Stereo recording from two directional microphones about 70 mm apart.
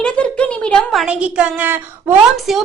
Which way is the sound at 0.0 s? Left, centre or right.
Centre.